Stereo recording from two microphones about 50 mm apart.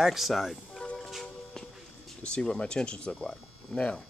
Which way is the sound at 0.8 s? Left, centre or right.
Left.